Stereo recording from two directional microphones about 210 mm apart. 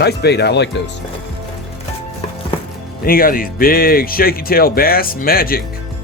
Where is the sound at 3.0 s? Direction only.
45° left (ahead or behind).